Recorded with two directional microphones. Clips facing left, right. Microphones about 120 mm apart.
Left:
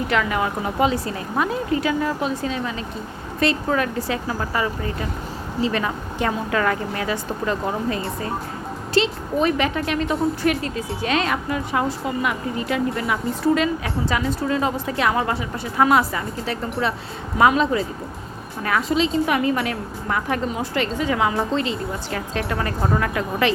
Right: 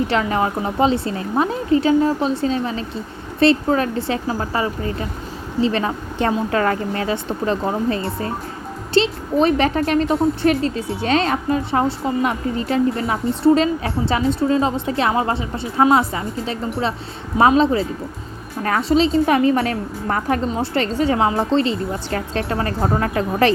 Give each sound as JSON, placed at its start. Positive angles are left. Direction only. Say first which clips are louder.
{"t": 0.1, "sound": "a woman's voice", "louder": "right 2 dB", "side_deg": -30}